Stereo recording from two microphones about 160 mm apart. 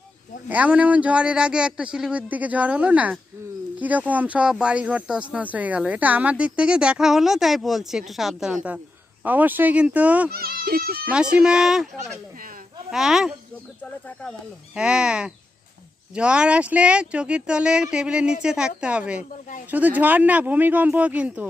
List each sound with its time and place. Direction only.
0.4 s a woman's voice: 10° right (ahead or behind)
10.3 s speech: 70° right (ahead or behind)
11.1 s a woman's voice: 5° right (ahead or behind)
14.8 s a woman's voice: 5° right (ahead or behind)